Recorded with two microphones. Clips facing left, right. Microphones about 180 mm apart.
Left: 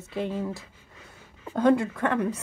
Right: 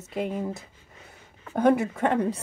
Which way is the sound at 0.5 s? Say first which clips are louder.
Even; 20° right (ahead or behind).